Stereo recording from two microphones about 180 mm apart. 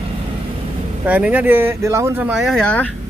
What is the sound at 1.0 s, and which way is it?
Speech, 10° right (ahead or behind).